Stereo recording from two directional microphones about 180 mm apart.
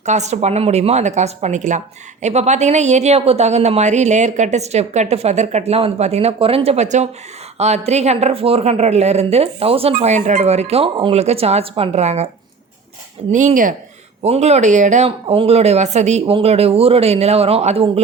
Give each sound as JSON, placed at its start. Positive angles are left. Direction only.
{"t": 0.0, "sound": "speech", "side_deg": -40}
{"t": 13.3, "sound": "speech", "side_deg": -45}